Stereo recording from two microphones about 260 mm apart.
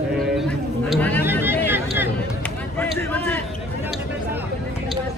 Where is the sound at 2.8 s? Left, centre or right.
Centre.